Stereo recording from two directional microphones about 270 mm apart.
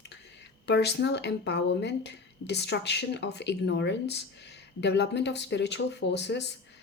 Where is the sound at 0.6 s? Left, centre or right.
Left.